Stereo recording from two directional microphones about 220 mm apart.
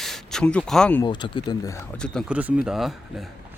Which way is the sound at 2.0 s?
5° left (ahead or behind).